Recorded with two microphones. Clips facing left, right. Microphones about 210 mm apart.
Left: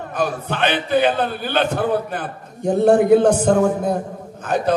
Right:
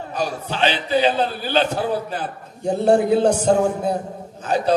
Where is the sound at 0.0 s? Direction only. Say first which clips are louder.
Left 2 dB; 55° left (ahead or behind).